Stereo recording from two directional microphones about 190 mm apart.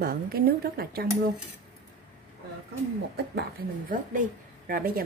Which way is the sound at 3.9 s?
50° right (ahead or behind).